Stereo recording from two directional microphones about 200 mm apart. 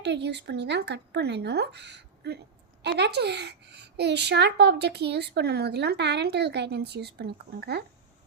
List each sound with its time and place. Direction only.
0.0 s a child's voice: 60° right (ahead or behind)